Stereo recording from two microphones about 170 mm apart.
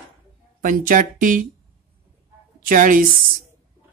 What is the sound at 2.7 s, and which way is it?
Speech, 50° right (ahead or behind).